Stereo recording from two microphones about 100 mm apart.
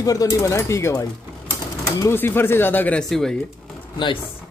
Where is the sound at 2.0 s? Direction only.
20° left (ahead or behind).